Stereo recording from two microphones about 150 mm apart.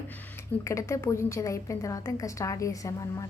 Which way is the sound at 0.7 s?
20° left (ahead or behind).